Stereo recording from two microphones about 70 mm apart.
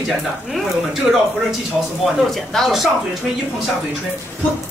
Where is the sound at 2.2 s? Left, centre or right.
Centre.